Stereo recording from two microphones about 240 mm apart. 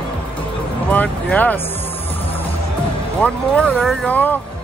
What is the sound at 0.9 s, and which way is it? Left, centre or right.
Speech, centre.